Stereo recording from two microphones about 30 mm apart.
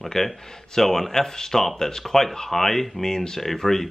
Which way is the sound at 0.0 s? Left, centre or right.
Centre.